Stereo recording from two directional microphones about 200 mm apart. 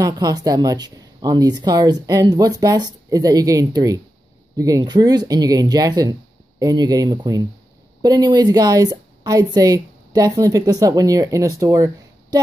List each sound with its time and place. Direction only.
0.0 s a woman's voice: 20° right (ahead or behind)